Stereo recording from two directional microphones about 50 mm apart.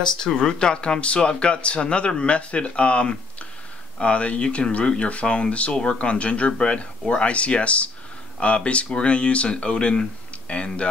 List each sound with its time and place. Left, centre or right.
0.2 s speech: centre